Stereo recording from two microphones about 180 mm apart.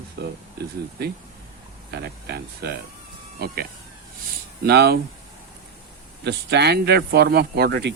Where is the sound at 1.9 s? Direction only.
65° right (ahead or behind).